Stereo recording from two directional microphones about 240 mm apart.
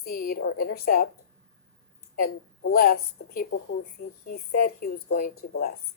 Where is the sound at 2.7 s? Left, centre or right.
Left.